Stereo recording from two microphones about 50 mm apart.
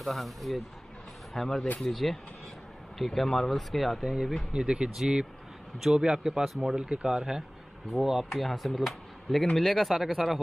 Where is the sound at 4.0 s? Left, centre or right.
Centre.